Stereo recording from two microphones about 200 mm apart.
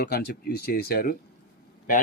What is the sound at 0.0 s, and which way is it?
Speech, 55° left (ahead or behind).